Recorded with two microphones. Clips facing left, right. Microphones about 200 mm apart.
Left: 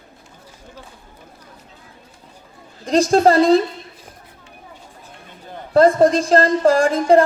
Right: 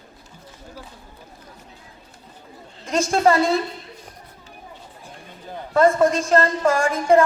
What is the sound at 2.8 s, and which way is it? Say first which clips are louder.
Speech: left 5 dB; 35° left (ahead or behind).